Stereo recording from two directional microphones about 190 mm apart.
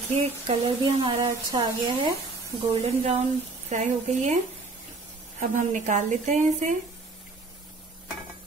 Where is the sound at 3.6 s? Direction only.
35° right (ahead or behind).